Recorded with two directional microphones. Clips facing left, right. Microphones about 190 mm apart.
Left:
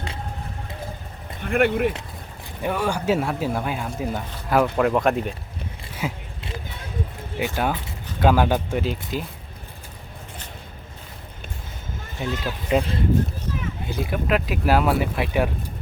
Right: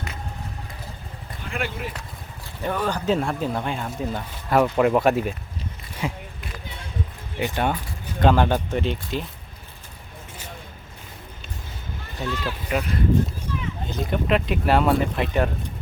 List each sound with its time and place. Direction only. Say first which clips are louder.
1.4 s speech: left 10 dB; 55° left (ahead or behind)
2.6 s speech: left 1 dB; 10° left (ahead or behind)
7.3 s speech: even; 5° left (ahead or behind)
12.2 s speech: left 1 dB; 15° left (ahead or behind)
12.7 s speech: left 4 dB; 30° left (ahead or behind)
13.8 s speech: right 1 dB; 10° left (ahead or behind)